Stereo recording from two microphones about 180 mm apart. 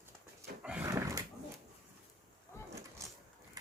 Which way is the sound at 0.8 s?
20° right (ahead or behind).